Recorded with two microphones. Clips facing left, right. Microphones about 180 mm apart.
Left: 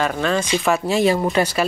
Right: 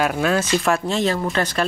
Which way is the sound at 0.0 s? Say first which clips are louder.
Right 1 dB; 5° right (ahead or behind).